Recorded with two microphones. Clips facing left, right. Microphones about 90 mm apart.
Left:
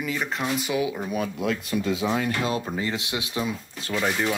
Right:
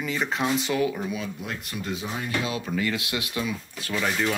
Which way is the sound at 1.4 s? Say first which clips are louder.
Left 8 dB; 90° left.